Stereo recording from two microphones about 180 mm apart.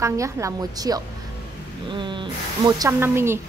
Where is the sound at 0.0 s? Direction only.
15° right (ahead or behind).